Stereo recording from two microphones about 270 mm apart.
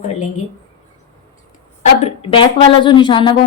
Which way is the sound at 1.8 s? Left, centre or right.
Left.